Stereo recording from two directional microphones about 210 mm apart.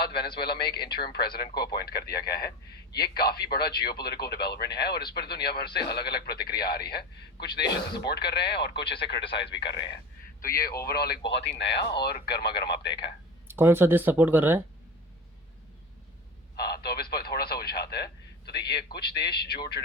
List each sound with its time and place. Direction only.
0.0 s a man's voice: 50° left (ahead or behind)
8.8 s speech: 25° left (ahead or behind)
9.4 s speech: 55° left (ahead or behind)
10.4 s speech: 15° left (ahead or behind)
10.8 s speech: 50° left (ahead or behind)
13.5 s speech: 10° right (ahead or behind)
16.6 s speech: 50° left (ahead or behind)